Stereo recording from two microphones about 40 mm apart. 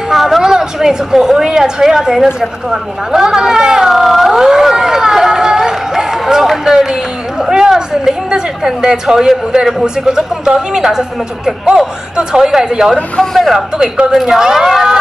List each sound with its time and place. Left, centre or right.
0.1 s a sound: centre
0.4 s a woman's voice: centre
3.9 s a sound: centre
8.6 s a woman's voice: centre
13.2 s speech: centre
14.1 s a woman's voice: centre